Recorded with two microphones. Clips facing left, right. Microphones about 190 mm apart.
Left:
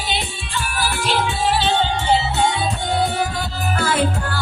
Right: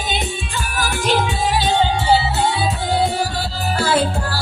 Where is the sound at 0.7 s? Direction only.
45° right (ahead or behind).